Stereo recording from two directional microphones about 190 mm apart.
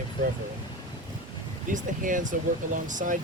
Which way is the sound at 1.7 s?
45° right (ahead or behind).